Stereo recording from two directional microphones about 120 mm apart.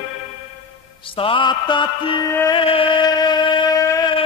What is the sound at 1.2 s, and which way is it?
Mantra, 40° left (ahead or behind).